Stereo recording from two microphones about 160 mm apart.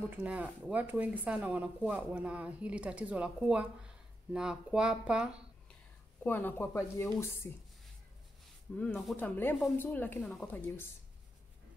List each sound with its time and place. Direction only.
0.1 s speech: 10° right (ahead or behind)
6.2 s a woman's voice: 10° left (ahead or behind)
8.7 s a woman's voice: 5° left (ahead or behind)